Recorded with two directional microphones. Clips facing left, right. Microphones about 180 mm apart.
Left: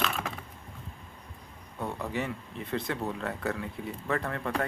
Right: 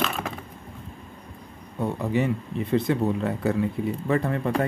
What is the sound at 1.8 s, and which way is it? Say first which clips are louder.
Speech: right 8 dB; 15° right (ahead or behind).